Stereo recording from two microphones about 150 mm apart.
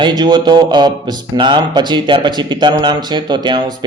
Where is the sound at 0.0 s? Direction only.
30° right (ahead or behind).